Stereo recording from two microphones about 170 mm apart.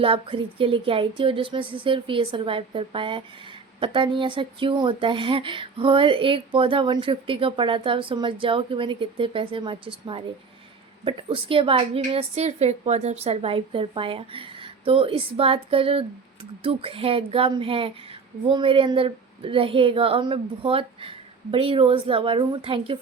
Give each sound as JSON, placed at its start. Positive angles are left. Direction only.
{"t": 0.0, "sound": "speech", "side_deg": -30}